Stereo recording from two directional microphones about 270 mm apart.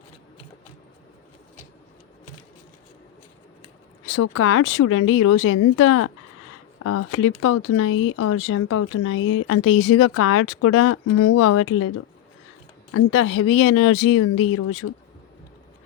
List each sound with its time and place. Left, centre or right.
4.0 s speech: left